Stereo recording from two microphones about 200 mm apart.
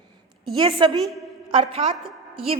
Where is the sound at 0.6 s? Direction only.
25° right (ahead or behind).